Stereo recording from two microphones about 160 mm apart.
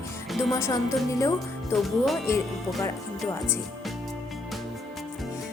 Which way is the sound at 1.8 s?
Centre (ahead or behind).